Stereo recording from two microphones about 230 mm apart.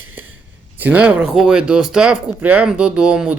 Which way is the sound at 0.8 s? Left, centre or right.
Centre.